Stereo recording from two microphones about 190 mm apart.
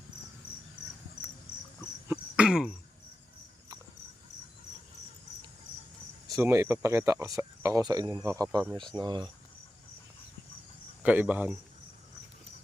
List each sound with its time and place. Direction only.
1.2 s cricket: 55° left (ahead or behind)
2.0 s cricket: 5° right (ahead or behind)
6.2 s speech: 15° right (ahead or behind)
9.0 s cricket: 25° right (ahead or behind)
11.0 s speech: 10° right (ahead or behind)